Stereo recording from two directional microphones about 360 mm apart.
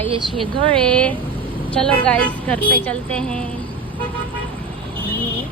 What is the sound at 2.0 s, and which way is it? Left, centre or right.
A woman's voice, centre.